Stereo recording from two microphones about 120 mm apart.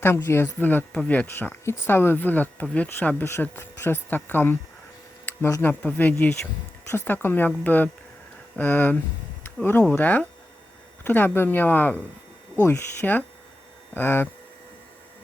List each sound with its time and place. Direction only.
0.0 s speech: 20° left (ahead or behind)
5.6 s speech: 15° left (ahead or behind)